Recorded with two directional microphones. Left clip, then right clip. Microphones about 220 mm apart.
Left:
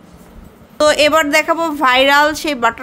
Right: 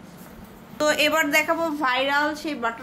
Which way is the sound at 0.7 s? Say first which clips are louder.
Left 9 dB; 55° left (ahead or behind).